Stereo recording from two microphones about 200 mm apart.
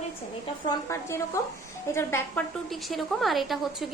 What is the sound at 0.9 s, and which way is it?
A woman's voice, 15° left (ahead or behind).